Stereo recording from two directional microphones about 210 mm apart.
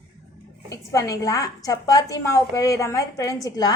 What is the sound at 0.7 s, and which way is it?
A woman's voice, 15° left (ahead or behind).